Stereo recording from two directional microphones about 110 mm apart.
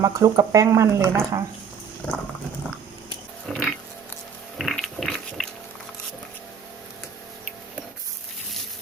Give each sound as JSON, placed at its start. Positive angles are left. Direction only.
{"t": 0.0, "sound": "speech", "side_deg": -30}
{"t": 2.0, "sound": "dog", "side_deg": 10}
{"t": 3.5, "sound": "pig", "side_deg": 5}
{"t": 4.5, "sound": "a sound", "side_deg": 0}